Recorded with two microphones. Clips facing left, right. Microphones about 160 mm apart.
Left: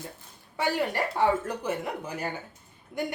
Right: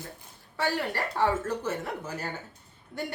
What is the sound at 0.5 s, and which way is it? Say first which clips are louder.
A woman's voice: left 2 dB; 15° left (ahead or behind).